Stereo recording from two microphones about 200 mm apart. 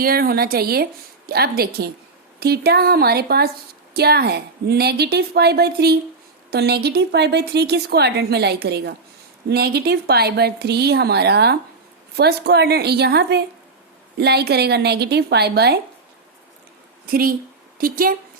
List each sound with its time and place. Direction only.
0.0 s a woman's voice: 50° right (ahead or behind)
17.1 s a woman's voice: 45° right (ahead or behind)